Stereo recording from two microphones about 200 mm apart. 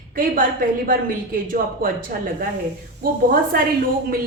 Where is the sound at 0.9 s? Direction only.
45° right (ahead or behind).